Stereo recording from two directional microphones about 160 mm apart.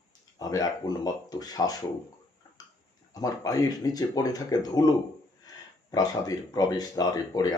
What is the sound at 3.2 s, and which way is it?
Speech, 20° left (ahead or behind).